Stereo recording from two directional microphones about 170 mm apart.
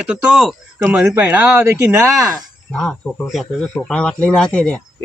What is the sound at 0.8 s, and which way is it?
Speech, 15° right (ahead or behind).